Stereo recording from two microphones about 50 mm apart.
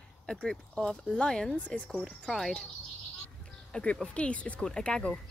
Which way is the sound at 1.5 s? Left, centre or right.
Left.